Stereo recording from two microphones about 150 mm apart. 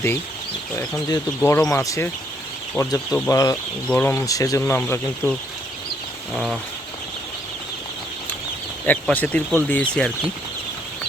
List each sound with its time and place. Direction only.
1.4 s speech: 15° left (ahead or behind)
6.3 s bird: centre (ahead or behind)
8.9 s speech: 10° left (ahead or behind)